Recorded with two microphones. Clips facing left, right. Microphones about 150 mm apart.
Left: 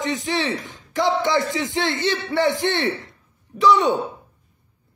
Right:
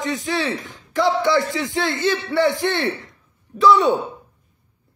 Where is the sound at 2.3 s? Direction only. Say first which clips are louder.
Right 1 dB; 20° left (ahead or behind).